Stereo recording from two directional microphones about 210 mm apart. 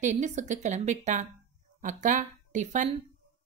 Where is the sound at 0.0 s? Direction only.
35° right (ahead or behind).